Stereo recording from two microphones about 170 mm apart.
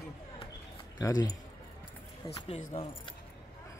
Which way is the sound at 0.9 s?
20° left (ahead or behind).